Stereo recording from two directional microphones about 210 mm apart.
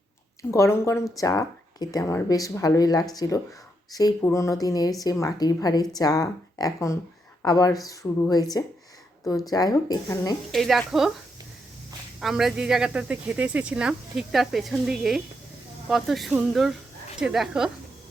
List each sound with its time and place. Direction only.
0.5 s speech: 15° left (ahead or behind)
10.5 s speech: centre (ahead or behind)
12.2 s speech: centre (ahead or behind)